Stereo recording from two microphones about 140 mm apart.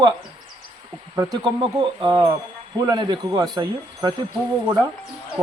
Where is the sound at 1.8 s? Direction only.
35° right (ahead or behind).